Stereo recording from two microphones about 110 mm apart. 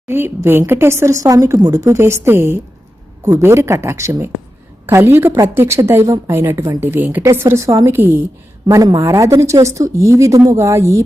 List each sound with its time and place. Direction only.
0.1 s speech: 20° right (ahead or behind)
8.6 s speech: 35° right (ahead or behind)